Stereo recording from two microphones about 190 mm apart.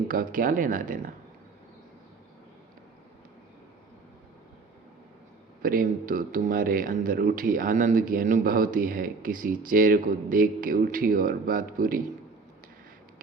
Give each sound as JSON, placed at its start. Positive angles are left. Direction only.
{"t": 0.1, "sound": "speech", "side_deg": -45}
{"t": 5.6, "sound": "speech", "side_deg": -45}